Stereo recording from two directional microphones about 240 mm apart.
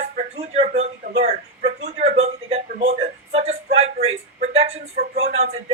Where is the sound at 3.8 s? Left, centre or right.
Right.